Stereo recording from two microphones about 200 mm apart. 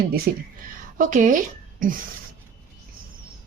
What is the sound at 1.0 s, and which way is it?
A woman's voice, 40° right (ahead or behind).